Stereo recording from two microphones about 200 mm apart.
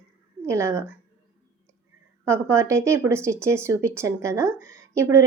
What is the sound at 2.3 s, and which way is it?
Speech, 15° right (ahead or behind).